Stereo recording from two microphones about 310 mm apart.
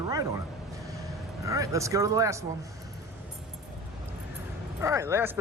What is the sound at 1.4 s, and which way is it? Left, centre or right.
A man's voice, centre.